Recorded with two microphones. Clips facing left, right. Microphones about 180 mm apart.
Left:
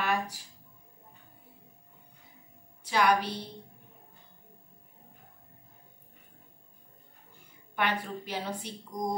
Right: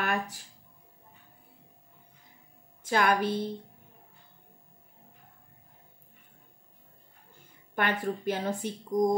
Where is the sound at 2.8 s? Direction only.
50° right (ahead or behind).